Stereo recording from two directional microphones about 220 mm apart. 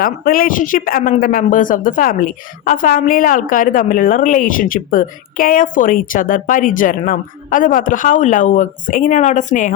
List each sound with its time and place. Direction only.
0.0 s speech: 40° left (ahead or behind)